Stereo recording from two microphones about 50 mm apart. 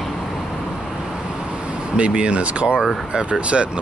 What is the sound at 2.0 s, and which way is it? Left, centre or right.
Speech, right.